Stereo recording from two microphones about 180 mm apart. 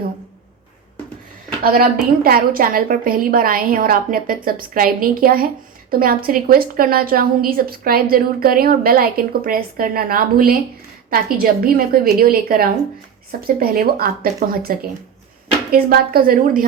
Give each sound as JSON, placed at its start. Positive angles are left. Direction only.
{"t": 1.6, "sound": "a woman's voice", "side_deg": -55}